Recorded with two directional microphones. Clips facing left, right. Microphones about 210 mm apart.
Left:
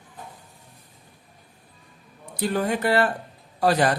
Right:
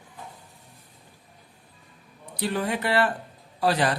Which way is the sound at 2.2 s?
45° left (ahead or behind).